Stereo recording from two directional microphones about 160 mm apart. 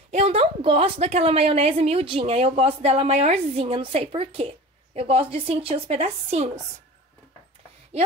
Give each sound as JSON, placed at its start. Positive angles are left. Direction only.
{"t": 0.1, "sound": "a woman's voice", "side_deg": -40}